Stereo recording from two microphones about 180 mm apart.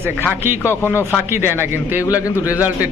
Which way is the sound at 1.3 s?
10° right (ahead or behind).